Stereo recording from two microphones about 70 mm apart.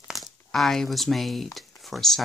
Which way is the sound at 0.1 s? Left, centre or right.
Centre.